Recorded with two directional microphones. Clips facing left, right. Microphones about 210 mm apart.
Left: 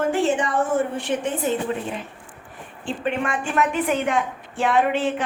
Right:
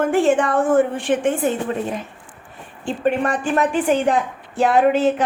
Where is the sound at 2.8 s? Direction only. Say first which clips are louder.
Right 5 dB; 40° right (ahead or behind).